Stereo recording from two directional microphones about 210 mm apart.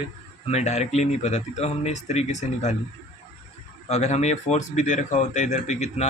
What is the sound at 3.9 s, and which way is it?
Speech, 30° left (ahead or behind).